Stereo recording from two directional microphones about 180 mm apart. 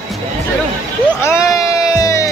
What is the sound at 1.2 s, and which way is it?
Music, 15° left (ahead or behind).